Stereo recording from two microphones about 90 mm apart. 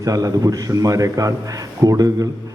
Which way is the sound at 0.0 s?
40° right (ahead or behind).